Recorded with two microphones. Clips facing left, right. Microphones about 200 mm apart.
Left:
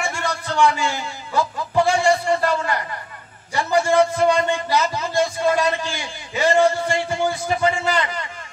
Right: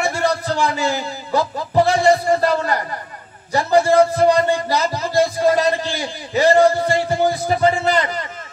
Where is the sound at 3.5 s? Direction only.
35° right (ahead or behind).